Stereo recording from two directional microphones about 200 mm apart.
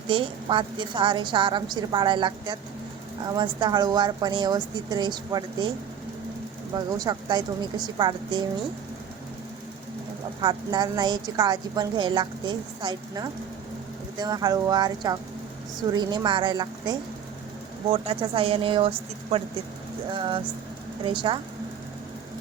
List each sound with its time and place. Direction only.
0.1 s a woman's voice: 25° right (ahead or behind)
6.7 s a woman's voice: 20° right (ahead or behind)
10.4 s a woman's voice: 20° right (ahead or behind)